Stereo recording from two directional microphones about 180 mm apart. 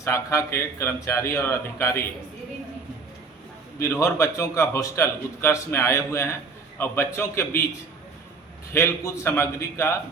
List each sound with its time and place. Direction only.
0.0 s a man's voice: 15° left (ahead or behind)
3.8 s a man's voice: 15° left (ahead or behind)
8.7 s a man's voice: 15° left (ahead or behind)